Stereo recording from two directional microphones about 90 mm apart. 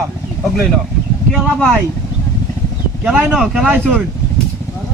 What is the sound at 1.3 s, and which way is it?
Speech, 10° left (ahead or behind).